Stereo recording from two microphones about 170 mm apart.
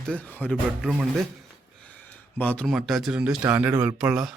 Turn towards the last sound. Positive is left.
turn(degrees=-5)  # may be behind; listen again after turning